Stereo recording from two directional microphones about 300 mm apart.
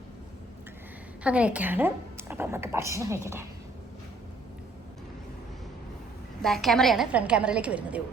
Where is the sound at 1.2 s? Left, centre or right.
Centre.